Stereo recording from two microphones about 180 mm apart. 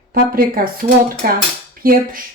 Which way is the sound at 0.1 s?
55° right (ahead or behind).